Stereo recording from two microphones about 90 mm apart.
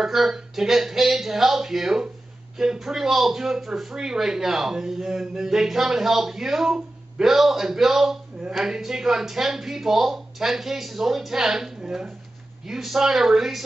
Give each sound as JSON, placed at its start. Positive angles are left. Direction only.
{"t": 0.0, "sound": "speech", "side_deg": -5}